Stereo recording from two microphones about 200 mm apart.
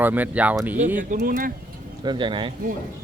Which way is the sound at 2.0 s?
25° right (ahead or behind).